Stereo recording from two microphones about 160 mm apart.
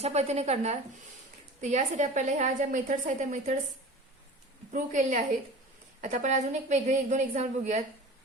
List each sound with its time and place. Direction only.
0.0 s a woman's voice: 45° right (ahead or behind)
4.7 s a woman's voice: 50° right (ahead or behind)